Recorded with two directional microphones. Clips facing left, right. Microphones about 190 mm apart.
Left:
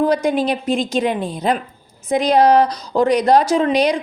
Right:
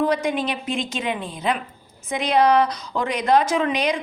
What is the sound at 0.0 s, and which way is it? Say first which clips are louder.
A woman's voice: left 5 dB; 35° left (ahead or behind).